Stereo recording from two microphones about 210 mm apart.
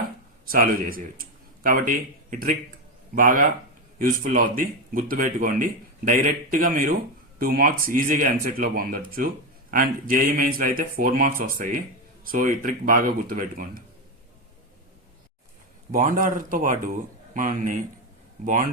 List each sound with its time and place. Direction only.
0.5 s a man's voice: 45° right (ahead or behind)
15.9 s speech: 40° right (ahead or behind)